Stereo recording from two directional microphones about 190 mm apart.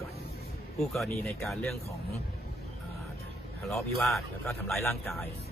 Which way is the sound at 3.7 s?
Centre (ahead or behind).